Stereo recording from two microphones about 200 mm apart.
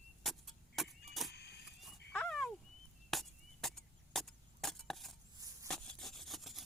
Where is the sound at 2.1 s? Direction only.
5° left (ahead or behind).